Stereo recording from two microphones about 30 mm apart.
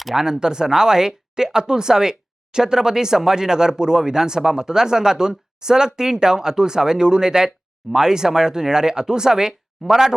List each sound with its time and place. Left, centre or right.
0.2 s speech: right